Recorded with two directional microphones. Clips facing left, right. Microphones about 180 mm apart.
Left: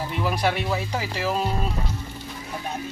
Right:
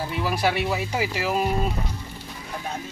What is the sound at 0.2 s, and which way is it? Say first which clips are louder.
Speech: even; 5° right (ahead or behind).